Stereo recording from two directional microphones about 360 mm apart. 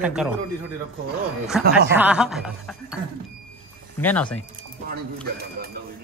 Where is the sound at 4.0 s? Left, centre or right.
Centre.